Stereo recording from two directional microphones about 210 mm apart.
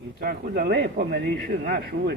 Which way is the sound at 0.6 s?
45° right (ahead or behind).